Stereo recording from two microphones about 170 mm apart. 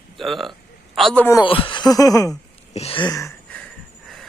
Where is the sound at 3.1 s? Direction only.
20° left (ahead or behind).